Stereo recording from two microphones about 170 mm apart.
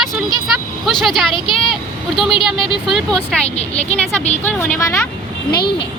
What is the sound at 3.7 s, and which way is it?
Speech, 40° left (ahead or behind).